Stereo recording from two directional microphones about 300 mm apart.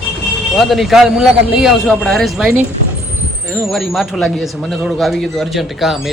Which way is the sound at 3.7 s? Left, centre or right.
Centre.